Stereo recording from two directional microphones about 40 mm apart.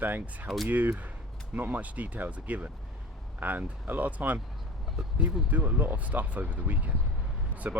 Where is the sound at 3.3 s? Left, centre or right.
Right.